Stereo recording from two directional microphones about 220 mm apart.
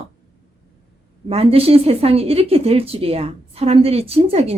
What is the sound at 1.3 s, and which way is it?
A woman's voice, 25° right (ahead or behind).